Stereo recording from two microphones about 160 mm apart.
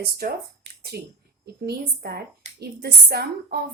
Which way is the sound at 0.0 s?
75° right (ahead or behind).